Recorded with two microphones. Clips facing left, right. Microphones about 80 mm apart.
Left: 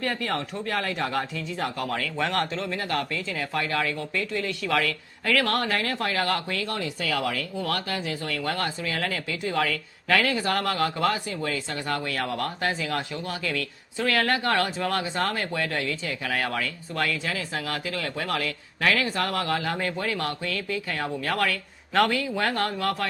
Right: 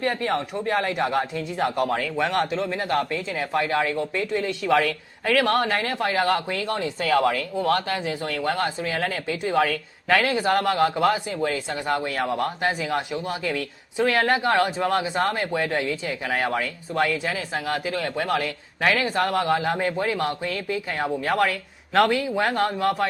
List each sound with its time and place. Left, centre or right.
0.0 s speech: right
2.1 s speech: centre
2.6 s speech: right